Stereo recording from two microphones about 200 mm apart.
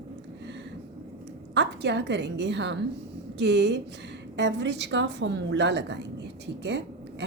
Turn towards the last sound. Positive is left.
turn(degrees=-60)  # may be behind; listen again after turning